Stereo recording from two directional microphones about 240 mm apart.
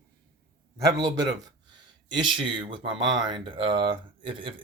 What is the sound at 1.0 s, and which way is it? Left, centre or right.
Speech, centre.